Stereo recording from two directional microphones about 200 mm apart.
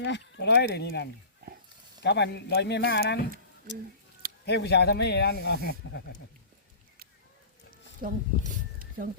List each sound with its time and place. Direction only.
0.0 s speech: 60° left (ahead or behind)
2.0 s speech: 60° left (ahead or behind)
4.4 s speech: 55° left (ahead or behind)
8.0 s a sound: 45° right (ahead or behind)